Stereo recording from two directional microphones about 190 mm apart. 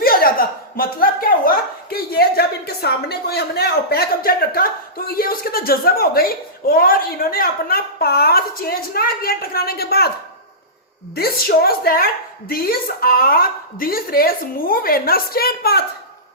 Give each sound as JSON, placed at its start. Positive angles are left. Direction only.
{"t": 0.0, "sound": "chuckle", "side_deg": 50}
{"t": 11.1, "sound": "a woman's voice", "side_deg": 55}